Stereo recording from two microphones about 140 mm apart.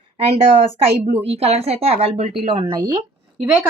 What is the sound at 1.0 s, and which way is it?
A woman's voice, 45° right (ahead or behind).